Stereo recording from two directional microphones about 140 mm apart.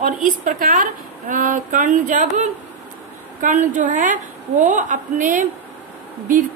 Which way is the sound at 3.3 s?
60° right (ahead or behind).